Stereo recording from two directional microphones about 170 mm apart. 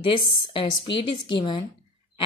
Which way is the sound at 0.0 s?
30° left (ahead or behind).